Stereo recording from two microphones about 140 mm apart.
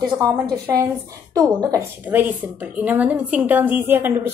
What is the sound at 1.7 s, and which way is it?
A woman's voice, 15° right (ahead or behind).